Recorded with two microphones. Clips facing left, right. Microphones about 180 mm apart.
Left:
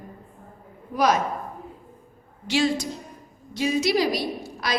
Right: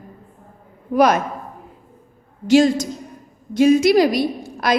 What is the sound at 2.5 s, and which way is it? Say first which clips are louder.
A woman's voice: right 9 dB; 45° right (ahead or behind).